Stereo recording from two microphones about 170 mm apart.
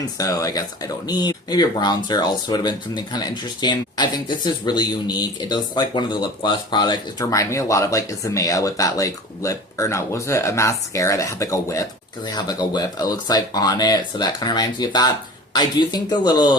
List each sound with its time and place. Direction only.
0.2 s speech: 20° left (ahead or behind)